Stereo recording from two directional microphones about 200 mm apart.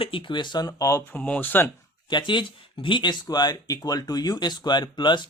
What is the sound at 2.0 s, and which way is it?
Speech, 25° left (ahead or behind).